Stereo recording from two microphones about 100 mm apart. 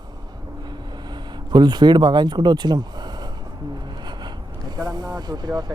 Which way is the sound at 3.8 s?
45° right (ahead or behind).